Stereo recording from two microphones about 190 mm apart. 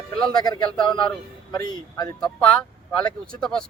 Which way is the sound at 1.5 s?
20° left (ahead or behind).